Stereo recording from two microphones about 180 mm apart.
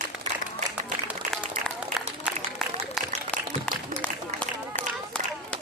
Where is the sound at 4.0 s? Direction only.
10° left (ahead or behind).